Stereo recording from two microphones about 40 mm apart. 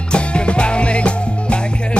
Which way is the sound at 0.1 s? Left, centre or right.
Left.